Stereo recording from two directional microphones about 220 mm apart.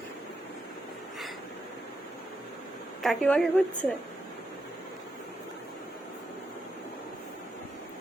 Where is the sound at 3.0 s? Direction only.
Centre (ahead or behind).